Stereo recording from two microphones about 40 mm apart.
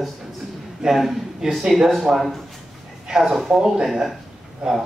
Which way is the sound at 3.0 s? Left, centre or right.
Centre.